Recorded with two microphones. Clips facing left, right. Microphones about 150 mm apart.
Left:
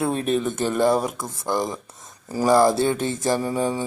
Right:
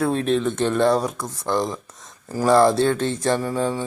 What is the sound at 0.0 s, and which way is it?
Speech, 5° left (ahead or behind).